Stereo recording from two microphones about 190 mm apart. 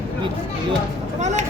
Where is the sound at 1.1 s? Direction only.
40° right (ahead or behind).